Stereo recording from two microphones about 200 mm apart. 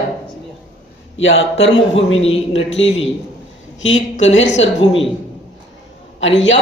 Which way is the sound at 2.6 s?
65° left (ahead or behind).